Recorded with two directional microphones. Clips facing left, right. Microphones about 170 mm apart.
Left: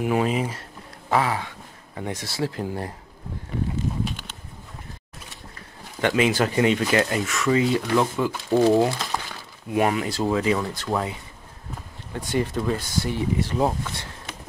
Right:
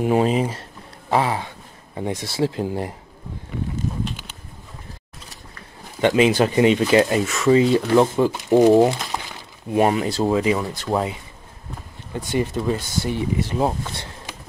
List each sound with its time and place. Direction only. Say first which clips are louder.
0.0 s speech: right 4 dB; 30° right (ahead or behind)
5.9 s speech: right 4 dB; 20° right (ahead or behind)
9.7 s speech: right 4 dB; 30° right (ahead or behind)
12.3 s speech: right 2 dB; 20° right (ahead or behind)